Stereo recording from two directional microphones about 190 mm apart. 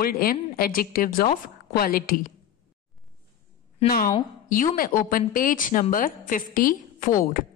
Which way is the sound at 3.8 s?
50° left (ahead or behind).